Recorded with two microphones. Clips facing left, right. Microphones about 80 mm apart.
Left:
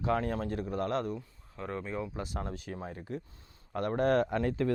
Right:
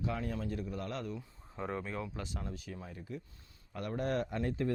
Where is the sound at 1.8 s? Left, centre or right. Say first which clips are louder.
Left 3 dB; centre.